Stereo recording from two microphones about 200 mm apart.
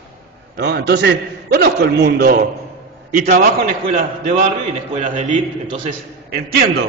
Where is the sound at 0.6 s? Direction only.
55° right (ahead or behind); by 5.4 s 40° right (ahead or behind).